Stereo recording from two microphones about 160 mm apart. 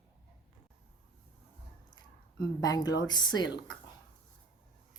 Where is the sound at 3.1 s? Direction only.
25° left (ahead or behind).